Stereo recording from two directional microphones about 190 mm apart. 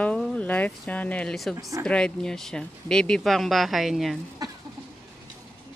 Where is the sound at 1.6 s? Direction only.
15° right (ahead or behind).